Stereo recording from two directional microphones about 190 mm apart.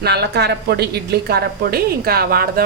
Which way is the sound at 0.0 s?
60° right (ahead or behind).